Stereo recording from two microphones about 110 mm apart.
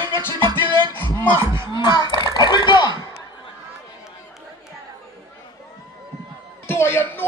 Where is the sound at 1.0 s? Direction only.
15° left (ahead or behind).